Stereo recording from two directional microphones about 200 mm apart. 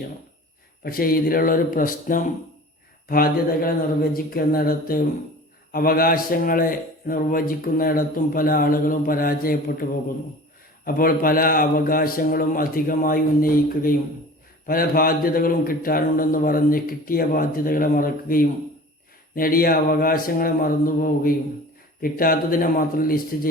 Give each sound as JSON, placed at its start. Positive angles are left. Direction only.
{"t": 0.9, "sound": "a man's voice", "side_deg": 45}
{"t": 10.8, "sound": "a man's voice", "side_deg": 45}